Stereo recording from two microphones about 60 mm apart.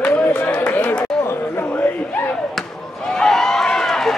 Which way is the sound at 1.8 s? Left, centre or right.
Left.